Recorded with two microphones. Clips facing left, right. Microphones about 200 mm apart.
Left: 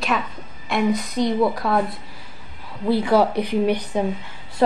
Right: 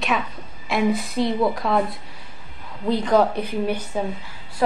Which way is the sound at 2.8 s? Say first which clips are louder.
Left 1 dB; 10° left (ahead or behind).